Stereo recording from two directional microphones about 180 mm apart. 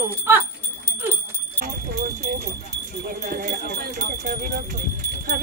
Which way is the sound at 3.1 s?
55° right (ahead or behind).